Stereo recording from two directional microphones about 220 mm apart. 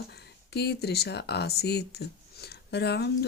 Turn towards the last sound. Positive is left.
turn(degrees=50)  # may be behind; listen again after turning